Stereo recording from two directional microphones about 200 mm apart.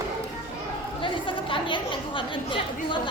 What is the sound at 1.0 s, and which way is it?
Chatter, 25° left (ahead or behind).